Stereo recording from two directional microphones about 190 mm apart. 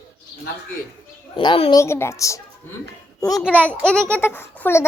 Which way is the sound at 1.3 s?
30° left (ahead or behind).